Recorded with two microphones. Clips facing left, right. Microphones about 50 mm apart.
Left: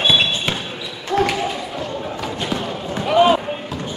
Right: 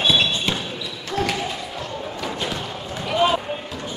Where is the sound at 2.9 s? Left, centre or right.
Left.